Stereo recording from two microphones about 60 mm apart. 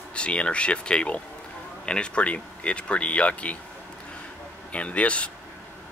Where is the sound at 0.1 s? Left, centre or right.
Centre.